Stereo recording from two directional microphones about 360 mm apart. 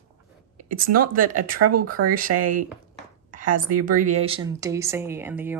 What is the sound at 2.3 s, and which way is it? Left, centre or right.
Speech, right.